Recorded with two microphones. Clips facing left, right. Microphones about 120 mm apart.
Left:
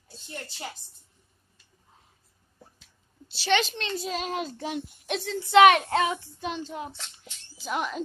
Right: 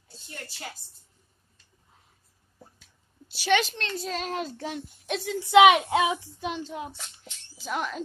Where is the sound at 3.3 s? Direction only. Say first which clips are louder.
Right 1 dB; 10° right (ahead or behind).